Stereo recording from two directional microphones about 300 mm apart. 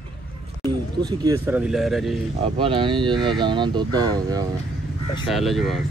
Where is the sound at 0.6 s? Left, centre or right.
Centre.